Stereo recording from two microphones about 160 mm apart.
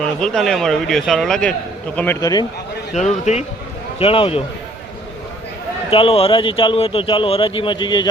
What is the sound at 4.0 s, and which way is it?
Speech, 35° left (ahead or behind).